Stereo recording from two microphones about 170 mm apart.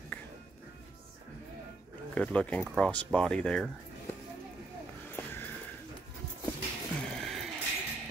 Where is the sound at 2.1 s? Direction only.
5° left (ahead or behind).